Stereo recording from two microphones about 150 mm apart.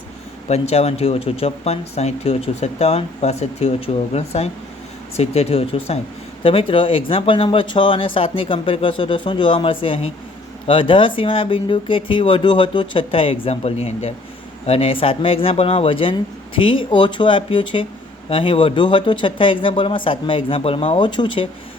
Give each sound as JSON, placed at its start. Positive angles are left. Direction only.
{"t": 0.4, "sound": "speech", "side_deg": 45}